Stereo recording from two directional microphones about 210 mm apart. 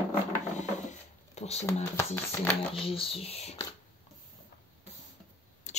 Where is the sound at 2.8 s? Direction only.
25° left (ahead or behind).